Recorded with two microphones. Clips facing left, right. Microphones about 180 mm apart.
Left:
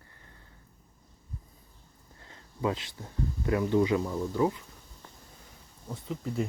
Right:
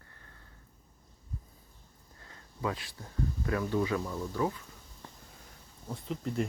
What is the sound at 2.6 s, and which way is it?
Speech, 20° left (ahead or behind).